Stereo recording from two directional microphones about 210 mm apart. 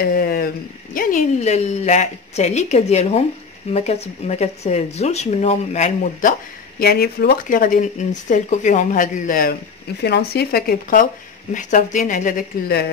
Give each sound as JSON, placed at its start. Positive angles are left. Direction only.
{"t": 0.0, "sound": "speech", "side_deg": 45}
{"t": 0.9, "sound": "speech", "side_deg": 35}
{"t": 6.8, "sound": "speech", "side_deg": 50}